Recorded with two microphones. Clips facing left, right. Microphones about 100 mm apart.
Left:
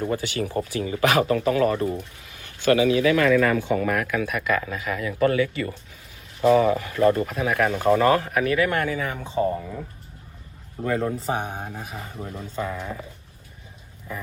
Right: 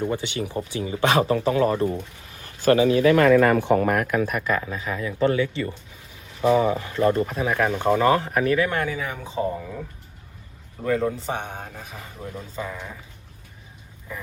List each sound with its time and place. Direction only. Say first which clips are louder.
0.0 s speech: even; 20° right (ahead or behind)
4.6 s speech: left 1 dB; 25° right (ahead or behind)
9.4 s speech: left 3 dB; centre (ahead or behind)
10.8 s speech: right 1 dB; centre (ahead or behind)